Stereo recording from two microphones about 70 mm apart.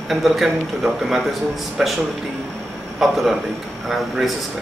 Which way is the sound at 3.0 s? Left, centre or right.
Centre.